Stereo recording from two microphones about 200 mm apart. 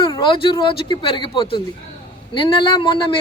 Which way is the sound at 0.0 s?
25° left (ahead or behind).